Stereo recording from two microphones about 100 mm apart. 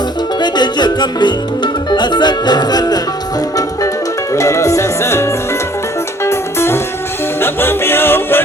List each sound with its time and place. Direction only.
0.3 s music: 45° left (ahead or behind)
4.3 s music: 30° left (ahead or behind)